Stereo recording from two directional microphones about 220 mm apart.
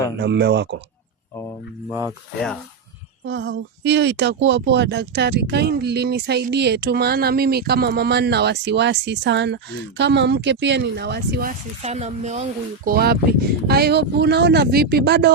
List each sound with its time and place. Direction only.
0.2 s speech: 50° right (ahead or behind)
1.9 s speech: 10° right (ahead or behind)
3.2 s speech: 55° right (ahead or behind)
11.8 s speech: 30° right (ahead or behind); by 15.3 s 50° right (ahead or behind)